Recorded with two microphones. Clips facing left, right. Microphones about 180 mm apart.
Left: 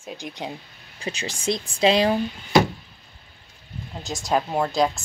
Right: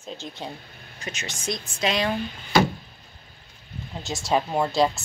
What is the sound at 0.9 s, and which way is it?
Speech, 30° left (ahead or behind).